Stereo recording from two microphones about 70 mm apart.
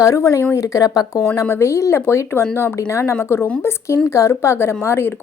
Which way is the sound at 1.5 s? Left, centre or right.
Left.